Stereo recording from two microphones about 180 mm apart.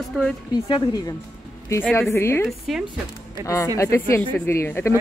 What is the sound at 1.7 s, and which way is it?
Speech, 10° left (ahead or behind).